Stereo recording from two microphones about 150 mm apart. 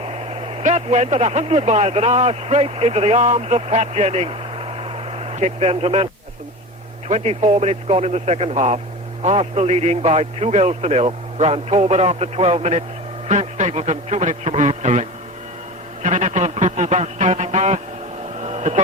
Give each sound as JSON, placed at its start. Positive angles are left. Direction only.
{"t": 0.0, "sound": "speech", "side_deg": -40}
{"t": 7.1, "sound": "a man's voice", "side_deg": -45}
{"t": 16.0, "sound": "a man's voice", "side_deg": -50}
{"t": 18.3, "sound": "vehicle", "side_deg": -50}